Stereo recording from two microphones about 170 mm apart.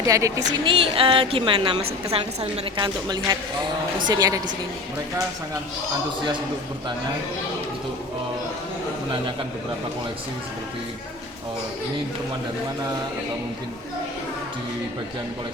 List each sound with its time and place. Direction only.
0.1 s a woman's voice: 20° right (ahead or behind)
0.6 s a woman's voice: 30° right (ahead or behind)